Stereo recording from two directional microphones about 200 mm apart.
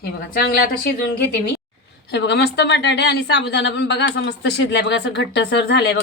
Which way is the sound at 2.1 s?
60° left (ahead or behind).